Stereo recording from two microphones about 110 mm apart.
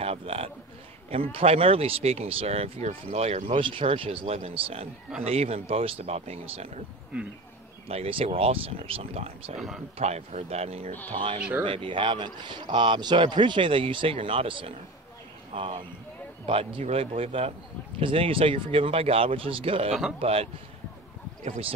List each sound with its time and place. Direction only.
0.0 s a sound: 65° right (ahead or behind)
1.1 s speech: 60° right (ahead or behind); by 3.6 s 75° right (ahead or behind)
3.6 s speech: 55° right (ahead or behind); by 6.7 s 70° right (ahead or behind)
7.9 s speech: 65° right (ahead or behind)
9.9 s speech: 80° right
11.1 s speech: 65° right (ahead or behind)
11.6 s a man's voice: 50° right (ahead or behind)
21.5 s speech: 60° right (ahead or behind)